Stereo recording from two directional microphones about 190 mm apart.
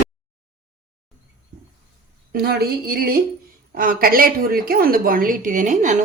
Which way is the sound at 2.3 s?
55° right (ahead or behind).